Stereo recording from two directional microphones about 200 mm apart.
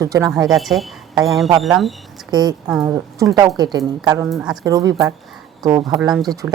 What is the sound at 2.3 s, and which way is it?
A woman's voice, 20° right (ahead or behind).